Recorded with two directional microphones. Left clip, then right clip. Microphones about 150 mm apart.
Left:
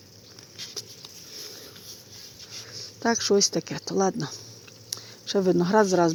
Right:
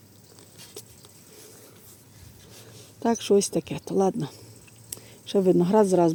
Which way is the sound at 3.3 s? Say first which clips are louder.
Even; 10° right (ahead or behind).